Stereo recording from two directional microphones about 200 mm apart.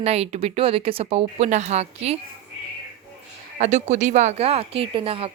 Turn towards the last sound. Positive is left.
turn(degrees=-30)  # may be behind; listen again after turning